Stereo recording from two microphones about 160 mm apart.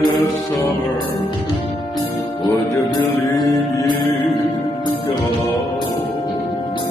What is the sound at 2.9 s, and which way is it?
Music, 25° left (ahead or behind).